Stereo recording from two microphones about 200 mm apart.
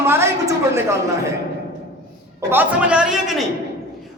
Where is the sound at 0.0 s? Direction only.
10° right (ahead or behind).